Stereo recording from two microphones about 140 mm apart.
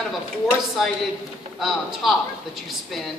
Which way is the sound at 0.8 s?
Centre (ahead or behind).